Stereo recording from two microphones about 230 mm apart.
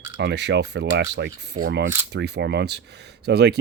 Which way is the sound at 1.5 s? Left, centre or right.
Right.